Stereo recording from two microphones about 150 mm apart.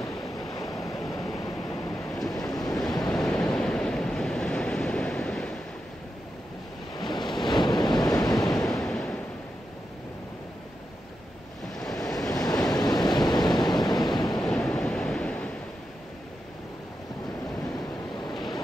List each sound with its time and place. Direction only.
0.0 s waves: 25° left (ahead or behind)
0.9 s vehicle: centre (ahead or behind)
2.4 s waves: 25° left (ahead or behind)
3.5 s waves: 5° left (ahead or behind)
7.0 s waves: 30° left (ahead or behind)
8.8 s a sound: 5° left (ahead or behind)
11.8 s waves: centre (ahead or behind)
12.1 s waves: 25° left (ahead or behind)
14.4 s waves: 5° left (ahead or behind)
18.3 s vehicle: centre (ahead or behind)